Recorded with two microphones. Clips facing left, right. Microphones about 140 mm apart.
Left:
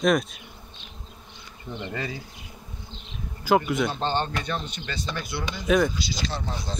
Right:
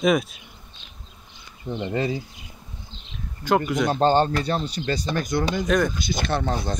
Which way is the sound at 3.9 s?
45° right (ahead or behind).